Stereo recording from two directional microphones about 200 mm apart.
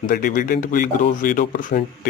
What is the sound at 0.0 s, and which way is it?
Speech, 45° left (ahead or behind).